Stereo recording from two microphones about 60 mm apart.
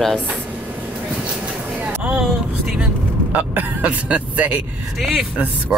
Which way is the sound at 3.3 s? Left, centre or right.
Right.